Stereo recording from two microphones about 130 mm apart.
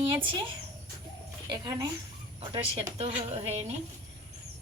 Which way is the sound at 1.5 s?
30° right (ahead or behind).